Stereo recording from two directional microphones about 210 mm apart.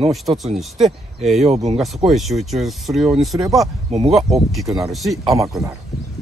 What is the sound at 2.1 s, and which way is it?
Speech, centre (ahead or behind).